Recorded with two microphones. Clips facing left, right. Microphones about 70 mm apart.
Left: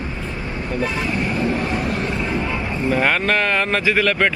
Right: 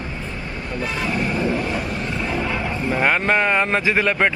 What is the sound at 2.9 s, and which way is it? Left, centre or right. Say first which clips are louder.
Speech: even; centre.